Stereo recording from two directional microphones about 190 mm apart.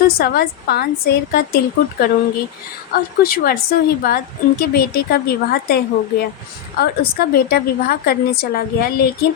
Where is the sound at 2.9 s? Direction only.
50° left (ahead or behind).